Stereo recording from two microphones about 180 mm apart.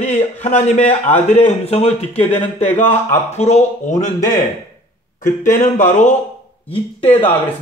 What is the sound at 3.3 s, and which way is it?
Speech, 35° left (ahead or behind).